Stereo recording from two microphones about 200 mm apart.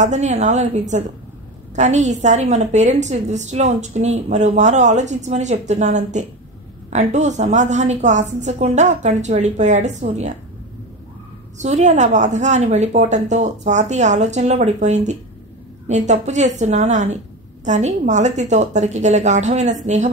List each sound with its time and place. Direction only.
0.0 s a woman's voice: 35° right (ahead or behind)
11.5 s a woman's voice: 35° right (ahead or behind)